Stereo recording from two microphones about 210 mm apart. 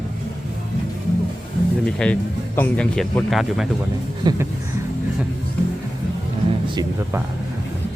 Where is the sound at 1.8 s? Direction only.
5° left (ahead or behind).